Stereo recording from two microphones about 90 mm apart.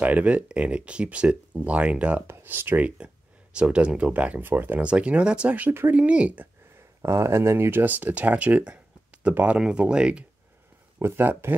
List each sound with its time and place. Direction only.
0.0 s speech: 15° right (ahead or behind)
3.5 s speech: 10° right (ahead or behind)
7.0 s speech: 30° right (ahead or behind); by 10.2 s 10° right (ahead or behind)
11.0 s speech: 25° right (ahead or behind)